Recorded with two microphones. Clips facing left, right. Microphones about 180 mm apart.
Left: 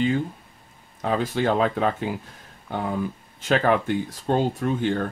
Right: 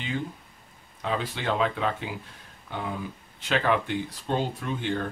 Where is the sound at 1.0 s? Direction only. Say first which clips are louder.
Left 6 dB; 45° left (ahead or behind).